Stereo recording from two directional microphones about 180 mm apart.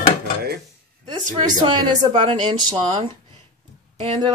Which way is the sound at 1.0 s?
25° right (ahead or behind).